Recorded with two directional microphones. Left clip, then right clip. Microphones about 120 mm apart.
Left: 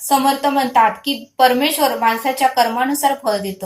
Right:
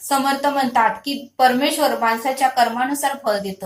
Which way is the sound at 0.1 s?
20° left (ahead or behind).